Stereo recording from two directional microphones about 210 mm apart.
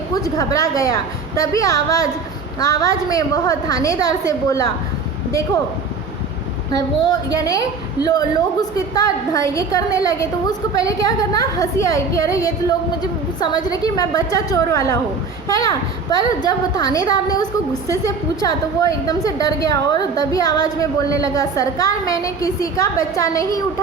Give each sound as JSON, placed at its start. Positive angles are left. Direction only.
{"t": 0.1, "sound": "a woman's voice", "side_deg": 15}
{"t": 6.7, "sound": "a woman's voice", "side_deg": 15}